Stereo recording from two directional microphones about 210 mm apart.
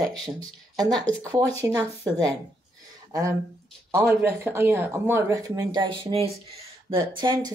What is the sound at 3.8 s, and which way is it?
A woman's voice, 10° right (ahead or behind).